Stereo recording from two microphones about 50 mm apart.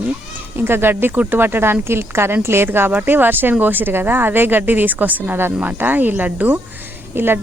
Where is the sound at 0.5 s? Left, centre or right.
Right.